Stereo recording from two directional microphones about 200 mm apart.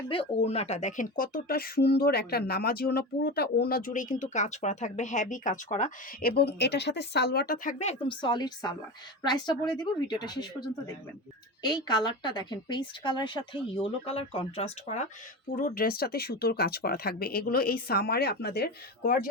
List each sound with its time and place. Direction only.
0.4 s speech: 30° left (ahead or behind)
6.3 s a woman's voice: 55° left (ahead or behind); by 10.4 s 20° left (ahead or behind)
11.6 s a woman's voice: 20° left (ahead or behind)
15.5 s speech: 45° left (ahead or behind)